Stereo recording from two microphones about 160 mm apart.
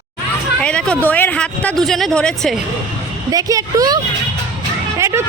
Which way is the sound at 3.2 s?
20° right (ahead or behind).